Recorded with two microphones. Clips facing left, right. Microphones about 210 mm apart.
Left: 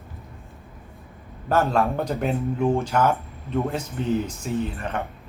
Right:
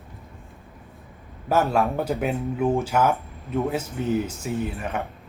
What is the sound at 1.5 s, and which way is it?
Speech, 10° right (ahead or behind).